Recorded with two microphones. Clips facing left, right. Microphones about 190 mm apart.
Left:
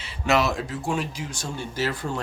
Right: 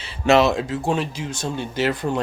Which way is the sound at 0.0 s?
25° right (ahead or behind).